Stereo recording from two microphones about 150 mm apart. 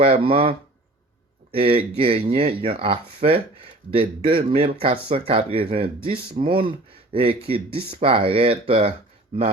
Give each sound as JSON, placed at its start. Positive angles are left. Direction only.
{"t": 0.0, "sound": "speech", "side_deg": -40}